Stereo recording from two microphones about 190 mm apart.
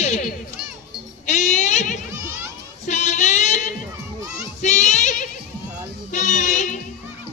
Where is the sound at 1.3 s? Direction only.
40° left (ahead or behind).